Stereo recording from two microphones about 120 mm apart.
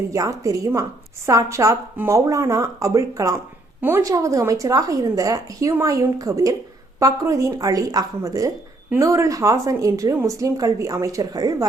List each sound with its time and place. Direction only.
0.1 s a woman's voice: 25° right (ahead or behind)